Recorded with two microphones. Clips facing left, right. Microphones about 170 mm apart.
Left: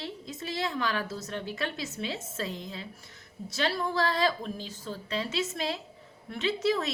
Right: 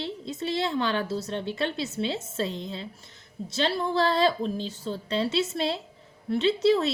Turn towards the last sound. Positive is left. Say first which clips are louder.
# right 6 dB
turn(degrees=-30)  # may be behind; listen again after turning